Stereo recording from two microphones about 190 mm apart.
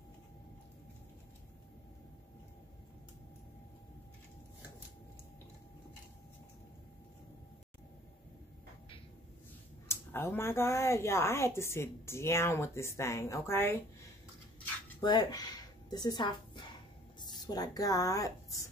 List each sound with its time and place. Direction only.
9.8 s speech: 10° left (ahead or behind)
15.0 s speech: 20° left (ahead or behind)